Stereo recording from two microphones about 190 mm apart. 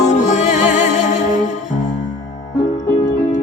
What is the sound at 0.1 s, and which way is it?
Music, 40° left (ahead or behind).